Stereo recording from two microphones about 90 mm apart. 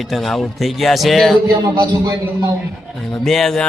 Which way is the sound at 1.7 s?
40° right (ahead or behind).